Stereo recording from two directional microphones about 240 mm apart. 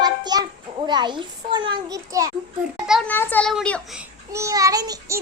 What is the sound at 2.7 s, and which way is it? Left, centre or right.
A child's voice, centre.